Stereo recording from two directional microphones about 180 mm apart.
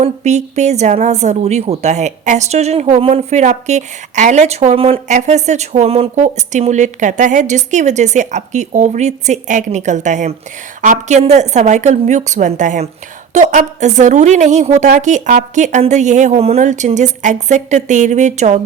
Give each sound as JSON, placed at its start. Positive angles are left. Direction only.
{"t": 0.0, "sound": "speech", "side_deg": -40}